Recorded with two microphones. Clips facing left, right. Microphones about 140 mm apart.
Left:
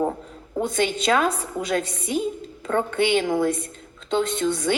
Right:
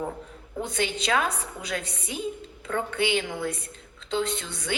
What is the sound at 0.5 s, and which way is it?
A woman's voice, 50° left (ahead or behind).